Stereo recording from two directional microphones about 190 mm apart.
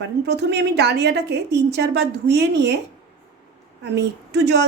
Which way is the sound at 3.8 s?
65° right (ahead or behind).